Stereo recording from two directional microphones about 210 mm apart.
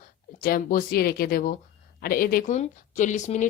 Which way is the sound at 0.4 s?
45° left (ahead or behind).